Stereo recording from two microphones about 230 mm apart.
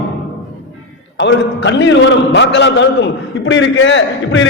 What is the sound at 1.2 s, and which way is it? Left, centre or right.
A man's voice, left.